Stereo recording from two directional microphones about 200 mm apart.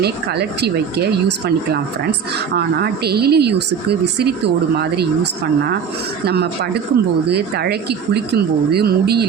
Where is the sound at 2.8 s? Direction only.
55° right (ahead or behind).